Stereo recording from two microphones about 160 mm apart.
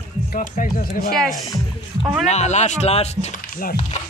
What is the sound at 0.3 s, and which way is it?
Speech, 55° left (ahead or behind).